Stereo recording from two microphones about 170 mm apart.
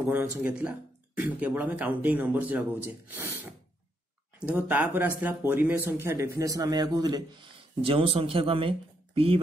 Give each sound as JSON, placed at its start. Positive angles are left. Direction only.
{"t": 0.1, "sound": "speech", "side_deg": -10}
{"t": 4.5, "sound": "a man's voice", "side_deg": -10}